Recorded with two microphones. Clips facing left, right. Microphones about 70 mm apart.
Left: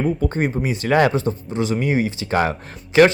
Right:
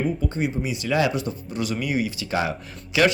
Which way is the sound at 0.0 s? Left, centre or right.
Left.